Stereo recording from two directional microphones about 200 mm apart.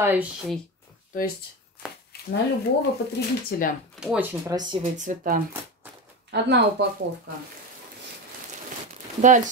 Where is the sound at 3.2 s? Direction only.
50° left (ahead or behind).